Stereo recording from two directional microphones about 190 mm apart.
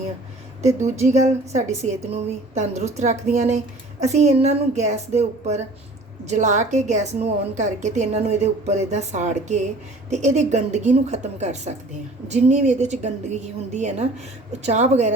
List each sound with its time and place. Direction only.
0.8 s a woman's voice: 35° right (ahead or behind)